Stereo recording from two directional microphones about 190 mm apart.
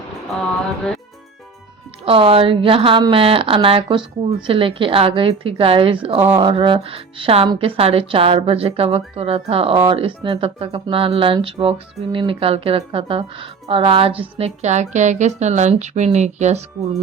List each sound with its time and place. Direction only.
2.0 s speech: 30° right (ahead or behind)